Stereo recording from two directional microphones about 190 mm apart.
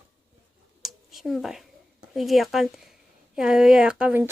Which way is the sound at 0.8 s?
Centre (ahead or behind).